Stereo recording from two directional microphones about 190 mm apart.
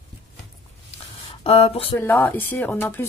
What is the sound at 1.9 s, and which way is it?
Speech, 10° left (ahead or behind).